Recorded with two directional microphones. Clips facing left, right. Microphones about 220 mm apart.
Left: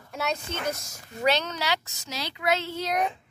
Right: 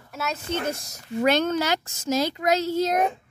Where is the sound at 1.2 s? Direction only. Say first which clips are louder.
Right 5 dB; 50° right (ahead or behind).